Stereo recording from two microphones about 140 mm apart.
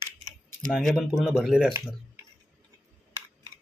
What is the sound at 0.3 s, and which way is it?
Speech, centre (ahead or behind).